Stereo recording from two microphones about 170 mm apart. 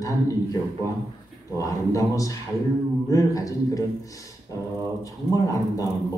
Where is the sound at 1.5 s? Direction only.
20° left (ahead or behind).